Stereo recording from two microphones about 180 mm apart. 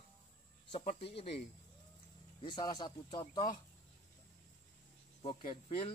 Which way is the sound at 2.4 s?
25° left (ahead or behind).